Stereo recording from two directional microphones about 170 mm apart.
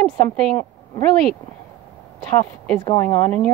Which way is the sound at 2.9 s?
15° left (ahead or behind).